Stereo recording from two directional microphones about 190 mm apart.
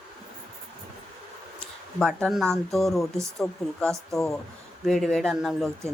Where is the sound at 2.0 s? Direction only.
5° left (ahead or behind).